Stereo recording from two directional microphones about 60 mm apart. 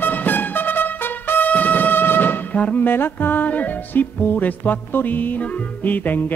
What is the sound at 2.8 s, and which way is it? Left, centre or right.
Music, left.